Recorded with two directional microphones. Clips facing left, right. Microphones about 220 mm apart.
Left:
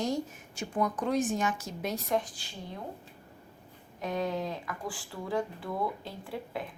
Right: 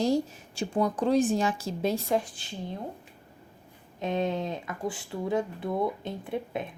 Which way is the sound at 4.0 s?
25° right (ahead or behind).